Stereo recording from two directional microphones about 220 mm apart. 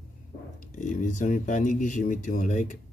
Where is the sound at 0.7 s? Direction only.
35° left (ahead or behind).